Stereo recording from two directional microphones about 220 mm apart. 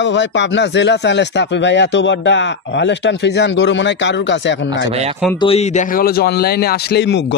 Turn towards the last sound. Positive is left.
turn(degrees=50)  # may be behind; listen again after turning